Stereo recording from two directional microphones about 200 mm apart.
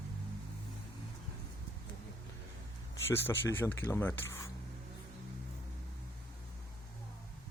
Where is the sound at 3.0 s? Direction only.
10° left (ahead or behind).